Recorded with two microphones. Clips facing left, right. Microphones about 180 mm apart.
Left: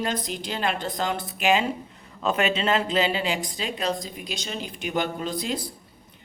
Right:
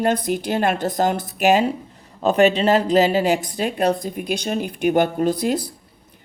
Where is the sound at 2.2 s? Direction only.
35° right (ahead or behind).